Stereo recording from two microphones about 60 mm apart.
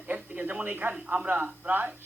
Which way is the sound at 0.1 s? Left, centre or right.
Right.